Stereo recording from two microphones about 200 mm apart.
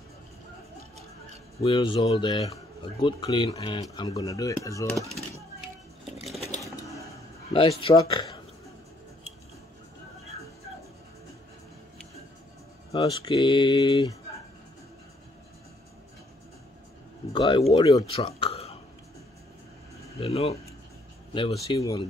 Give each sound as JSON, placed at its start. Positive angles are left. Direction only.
{"t": 1.6, "sound": "speech", "side_deg": 25}
{"t": 7.5, "sound": "speech", "side_deg": 25}
{"t": 12.9, "sound": "speech", "side_deg": 25}
{"t": 17.3, "sound": "speech", "side_deg": 25}
{"t": 20.2, "sound": "speech", "side_deg": 30}